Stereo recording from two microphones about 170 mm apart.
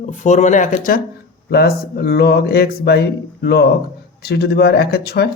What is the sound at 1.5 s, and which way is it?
Speech, 70° left (ahead or behind).